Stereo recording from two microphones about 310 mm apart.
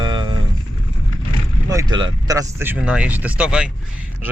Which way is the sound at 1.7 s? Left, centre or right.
Centre.